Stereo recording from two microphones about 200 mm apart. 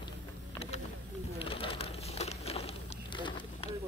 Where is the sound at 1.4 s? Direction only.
25° left (ahead or behind).